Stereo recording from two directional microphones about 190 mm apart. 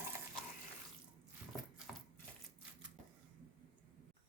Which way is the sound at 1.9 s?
5° right (ahead or behind).